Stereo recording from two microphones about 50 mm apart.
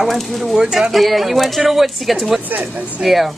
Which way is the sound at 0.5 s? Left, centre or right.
Centre.